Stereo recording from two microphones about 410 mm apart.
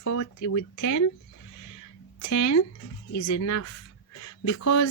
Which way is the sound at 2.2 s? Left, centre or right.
Left.